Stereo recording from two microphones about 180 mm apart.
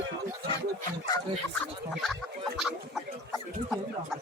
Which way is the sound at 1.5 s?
Centre (ahead or behind).